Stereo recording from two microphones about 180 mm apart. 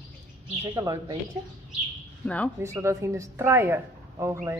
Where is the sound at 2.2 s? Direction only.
5° left (ahead or behind).